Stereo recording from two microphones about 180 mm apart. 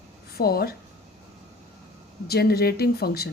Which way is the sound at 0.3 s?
60° left (ahead or behind).